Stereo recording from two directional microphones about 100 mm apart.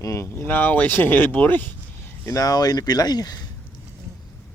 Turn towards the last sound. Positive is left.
turn(degrees=40)  # may be behind; listen again after turning